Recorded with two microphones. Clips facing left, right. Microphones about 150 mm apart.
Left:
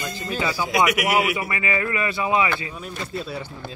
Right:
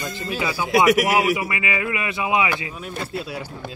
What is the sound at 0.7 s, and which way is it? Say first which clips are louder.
Speech: right 6 dB; 45° right (ahead or behind).